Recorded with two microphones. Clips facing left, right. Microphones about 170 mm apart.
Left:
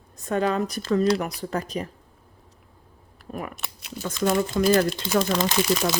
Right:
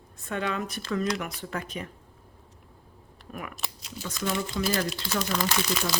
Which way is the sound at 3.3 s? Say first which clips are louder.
Left 5 dB; 35° left (ahead or behind).